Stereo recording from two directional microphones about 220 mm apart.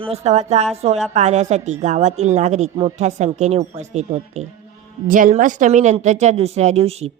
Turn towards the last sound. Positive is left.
turn(degrees=-30)  # may be behind; listen again after turning